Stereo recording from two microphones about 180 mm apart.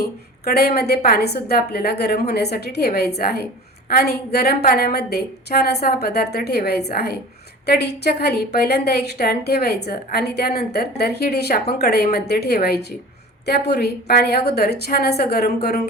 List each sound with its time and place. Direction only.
0.4 s a woman's voice: 60° left (ahead or behind)